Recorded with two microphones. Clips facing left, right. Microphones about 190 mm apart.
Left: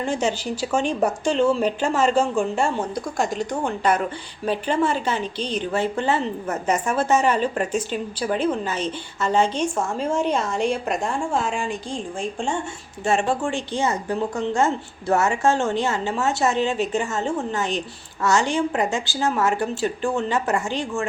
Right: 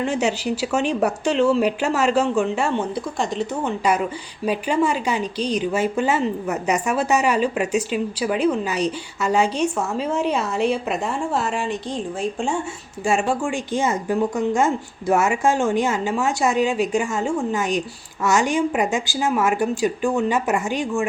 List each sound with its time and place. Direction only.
0.1 s a woman's voice: 5° right (ahead or behind)
5.2 s a woman's voice: 40° right (ahead or behind)
6.0 s a woman's voice: 5° right (ahead or behind)